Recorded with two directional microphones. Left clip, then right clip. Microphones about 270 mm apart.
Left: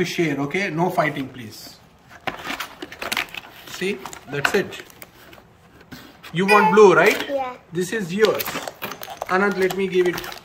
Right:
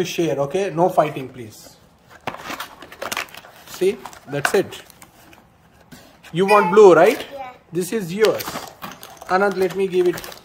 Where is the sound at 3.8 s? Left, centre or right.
Right.